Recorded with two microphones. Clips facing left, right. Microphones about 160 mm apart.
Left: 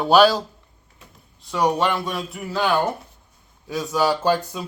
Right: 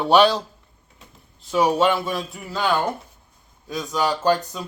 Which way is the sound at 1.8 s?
5° right (ahead or behind).